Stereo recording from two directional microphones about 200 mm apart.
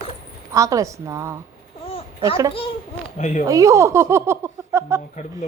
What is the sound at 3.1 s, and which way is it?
Speech, 35° left (ahead or behind).